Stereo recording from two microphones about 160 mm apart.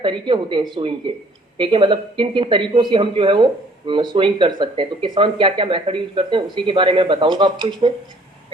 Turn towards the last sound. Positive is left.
turn(degrees=-30)  # may be behind; listen again after turning